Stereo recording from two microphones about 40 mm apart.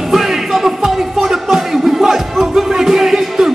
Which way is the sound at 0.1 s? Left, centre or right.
Centre.